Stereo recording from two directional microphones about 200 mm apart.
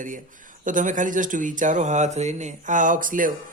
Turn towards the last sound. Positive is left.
turn(degrees=-40)  # may be behind; listen again after turning